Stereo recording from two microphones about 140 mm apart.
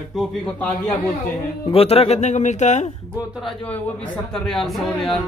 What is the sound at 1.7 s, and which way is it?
Speech, 45° left (ahead or behind).